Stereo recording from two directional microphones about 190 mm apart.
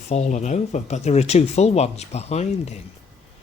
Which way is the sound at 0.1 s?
35° left (ahead or behind).